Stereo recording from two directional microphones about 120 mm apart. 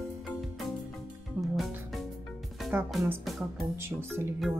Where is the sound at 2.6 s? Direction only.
Centre (ahead or behind).